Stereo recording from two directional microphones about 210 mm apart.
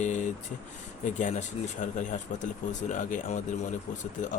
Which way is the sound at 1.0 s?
35° left (ahead or behind).